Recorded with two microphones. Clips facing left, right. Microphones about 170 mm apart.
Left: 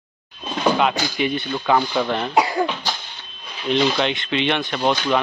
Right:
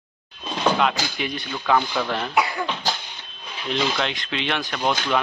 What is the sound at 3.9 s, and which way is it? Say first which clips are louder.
Speech: left 5 dB; centre (ahead or behind).